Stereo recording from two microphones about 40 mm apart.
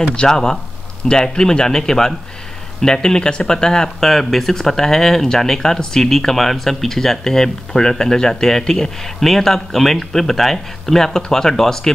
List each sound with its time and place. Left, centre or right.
0.1 s speech: centre